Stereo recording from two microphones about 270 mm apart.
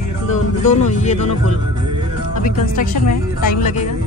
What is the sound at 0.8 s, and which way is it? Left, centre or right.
Music, left.